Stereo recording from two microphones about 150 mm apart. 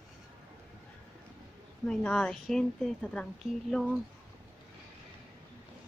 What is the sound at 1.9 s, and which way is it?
A woman's voice, 5° left (ahead or behind).